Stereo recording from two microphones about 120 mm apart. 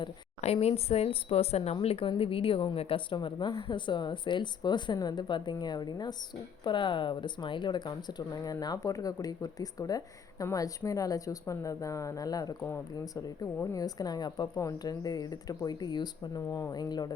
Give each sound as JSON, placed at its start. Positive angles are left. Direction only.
{"t": 0.4, "sound": "a woman's voice", "side_deg": 60}